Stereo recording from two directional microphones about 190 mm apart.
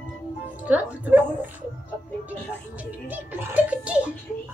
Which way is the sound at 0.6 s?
10° right (ahead or behind).